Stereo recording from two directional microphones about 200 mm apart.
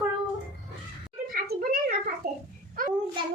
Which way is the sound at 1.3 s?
50° right (ahead or behind).